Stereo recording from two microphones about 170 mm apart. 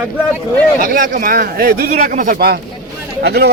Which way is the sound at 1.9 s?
50° right (ahead or behind).